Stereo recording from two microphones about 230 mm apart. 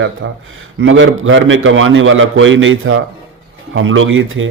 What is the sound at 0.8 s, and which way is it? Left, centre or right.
Speech, right.